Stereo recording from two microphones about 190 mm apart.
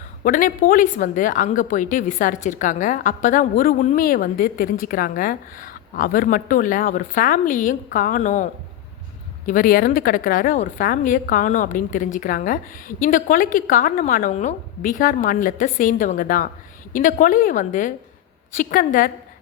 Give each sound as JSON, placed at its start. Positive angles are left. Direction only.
{"t": 0.3, "sound": "a woman's voice", "side_deg": 45}
{"t": 9.5, "sound": "a woman's voice", "side_deg": 45}